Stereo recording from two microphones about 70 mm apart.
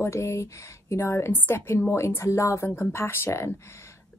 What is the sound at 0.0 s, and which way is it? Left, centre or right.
A woman's voice, left.